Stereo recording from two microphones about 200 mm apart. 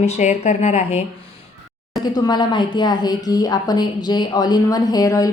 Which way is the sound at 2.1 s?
20° left (ahead or behind).